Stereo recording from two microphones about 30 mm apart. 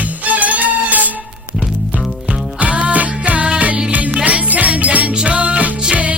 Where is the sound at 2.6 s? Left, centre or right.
Right.